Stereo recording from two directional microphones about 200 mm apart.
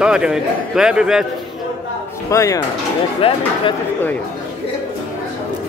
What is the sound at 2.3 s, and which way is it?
Speech, 15° left (ahead or behind).